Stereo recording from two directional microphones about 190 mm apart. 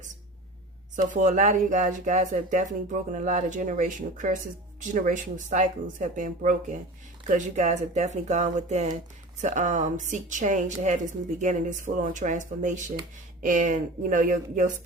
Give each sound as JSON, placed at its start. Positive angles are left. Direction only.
{"t": 1.1, "sound": "a woman's voice", "side_deg": -40}